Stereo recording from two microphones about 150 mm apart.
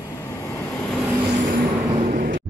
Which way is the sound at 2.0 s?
65° right (ahead or behind).